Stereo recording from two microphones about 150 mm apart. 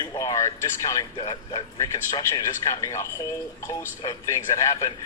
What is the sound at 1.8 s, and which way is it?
Speech, 25° left (ahead or behind).